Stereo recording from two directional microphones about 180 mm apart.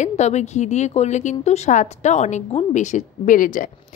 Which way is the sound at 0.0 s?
40° left (ahead or behind).